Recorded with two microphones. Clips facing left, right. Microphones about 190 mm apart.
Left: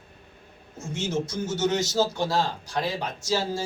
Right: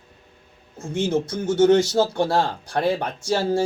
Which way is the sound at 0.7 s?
60° right (ahead or behind).